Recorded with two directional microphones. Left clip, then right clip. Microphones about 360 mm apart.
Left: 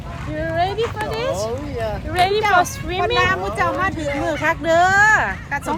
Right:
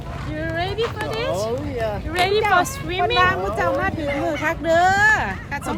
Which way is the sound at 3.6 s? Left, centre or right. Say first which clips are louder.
Left 1 dB; left.